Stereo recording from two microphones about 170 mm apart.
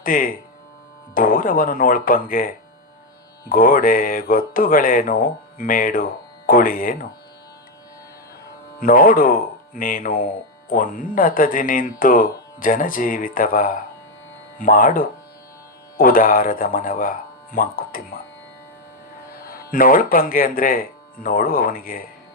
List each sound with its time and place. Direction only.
0.0 s speech: 55° left (ahead or behind)
3.5 s speech: 55° left (ahead or behind)
8.8 s speech: 55° left (ahead or behind)
19.3 s speech: 55° left (ahead or behind)